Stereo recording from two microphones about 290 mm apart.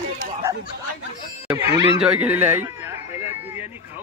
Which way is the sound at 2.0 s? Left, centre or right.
Centre.